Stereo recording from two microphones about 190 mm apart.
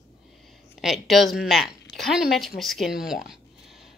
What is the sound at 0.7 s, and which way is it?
Speech, centre (ahead or behind).